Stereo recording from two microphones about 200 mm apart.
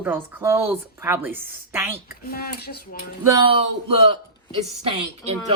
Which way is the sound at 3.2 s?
15° right (ahead or behind).